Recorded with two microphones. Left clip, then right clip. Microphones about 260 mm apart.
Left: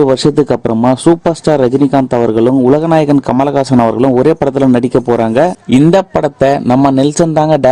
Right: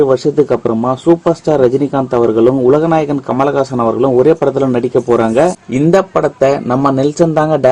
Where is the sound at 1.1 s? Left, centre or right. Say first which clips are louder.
Left 1 dB; left.